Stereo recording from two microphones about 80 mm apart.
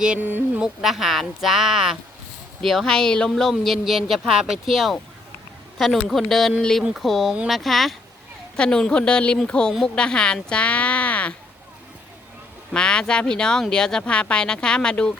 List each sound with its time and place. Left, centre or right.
0.0 s a sound: centre
0.3 s a sound: right
0.6 s speech: centre
6.8 s speech: centre
8.5 s speech: centre
12.7 s speech: centre